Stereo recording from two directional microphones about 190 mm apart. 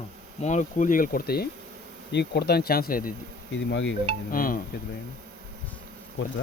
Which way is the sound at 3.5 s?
75° left (ahead or behind).